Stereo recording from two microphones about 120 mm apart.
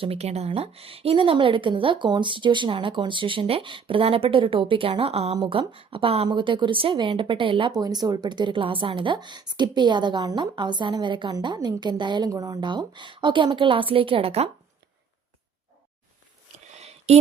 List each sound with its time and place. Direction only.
0.0 s a woman's voice: 60° right (ahead or behind)